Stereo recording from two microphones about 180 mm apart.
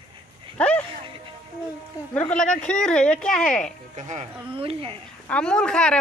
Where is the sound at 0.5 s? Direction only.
5° left (ahead or behind).